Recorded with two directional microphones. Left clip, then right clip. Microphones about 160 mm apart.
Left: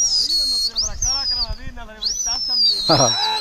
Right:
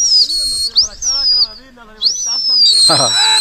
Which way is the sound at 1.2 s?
40° left (ahead or behind).